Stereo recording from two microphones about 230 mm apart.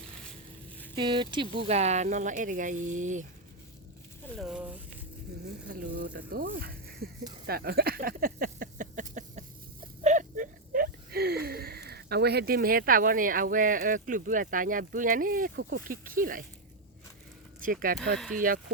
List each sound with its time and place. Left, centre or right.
0.9 s speech: right
4.4 s speech: centre
5.6 s speech: right
7.4 s a sound: right
17.6 s speech: right